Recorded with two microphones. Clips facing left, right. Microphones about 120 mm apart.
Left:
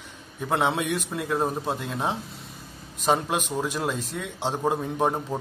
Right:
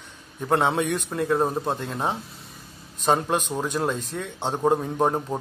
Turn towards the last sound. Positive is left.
turn(degrees=0)  # may be behind; listen again after turning